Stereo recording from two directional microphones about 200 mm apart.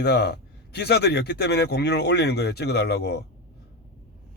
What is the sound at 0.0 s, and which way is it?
Speech, 55° left (ahead or behind).